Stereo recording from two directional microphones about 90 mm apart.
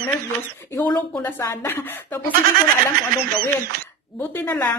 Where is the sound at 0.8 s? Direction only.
15° left (ahead or behind).